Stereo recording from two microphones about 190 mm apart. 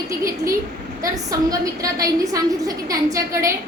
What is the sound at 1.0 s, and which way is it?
A woman's voice, 20° right (ahead or behind).